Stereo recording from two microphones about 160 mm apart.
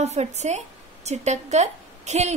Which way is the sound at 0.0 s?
45° right (ahead or behind).